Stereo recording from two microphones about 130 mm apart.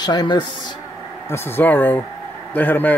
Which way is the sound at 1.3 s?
15° left (ahead or behind).